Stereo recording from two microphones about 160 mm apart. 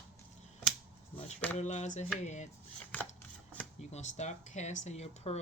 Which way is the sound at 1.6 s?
45° left (ahead or behind).